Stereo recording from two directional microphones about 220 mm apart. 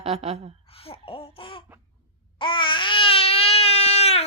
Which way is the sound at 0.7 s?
25° left (ahead or behind).